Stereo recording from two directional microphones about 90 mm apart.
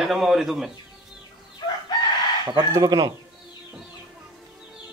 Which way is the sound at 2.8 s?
40° right (ahead or behind).